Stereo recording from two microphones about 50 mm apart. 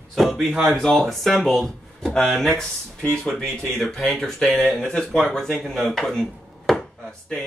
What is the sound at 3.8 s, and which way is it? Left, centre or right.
Speech, left.